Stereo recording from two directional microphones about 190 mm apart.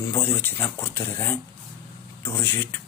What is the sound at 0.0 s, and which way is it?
Speech, 15° left (ahead or behind).